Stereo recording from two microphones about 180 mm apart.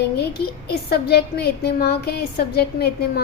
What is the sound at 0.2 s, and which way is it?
A woman's voice, 65° left (ahead or behind).